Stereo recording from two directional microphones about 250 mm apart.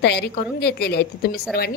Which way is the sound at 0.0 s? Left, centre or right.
Left.